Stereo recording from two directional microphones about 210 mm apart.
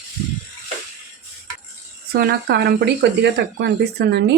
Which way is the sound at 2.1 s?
50° right (ahead or behind).